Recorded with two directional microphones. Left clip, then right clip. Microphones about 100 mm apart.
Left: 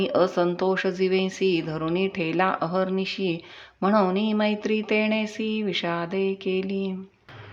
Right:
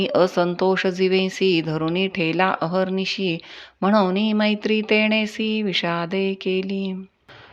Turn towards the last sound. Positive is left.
turn(degrees=-25)  # may be behind; listen again after turning